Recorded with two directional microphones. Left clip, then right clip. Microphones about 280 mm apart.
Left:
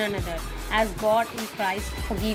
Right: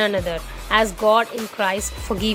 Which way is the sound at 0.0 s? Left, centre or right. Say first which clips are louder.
Right 8 dB; right.